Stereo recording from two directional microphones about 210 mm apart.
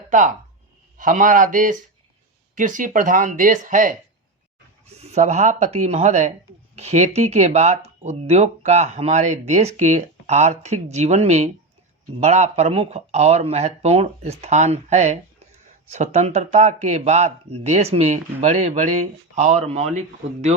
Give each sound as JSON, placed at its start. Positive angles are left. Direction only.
{"t": 0.9, "sound": "speech", "side_deg": -40}